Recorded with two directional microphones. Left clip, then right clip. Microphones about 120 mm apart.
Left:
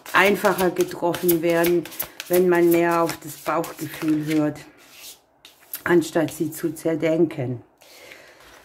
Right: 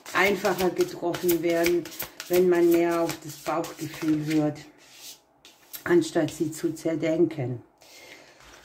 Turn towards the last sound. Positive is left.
turn(degrees=25)  # may be behind; listen again after turning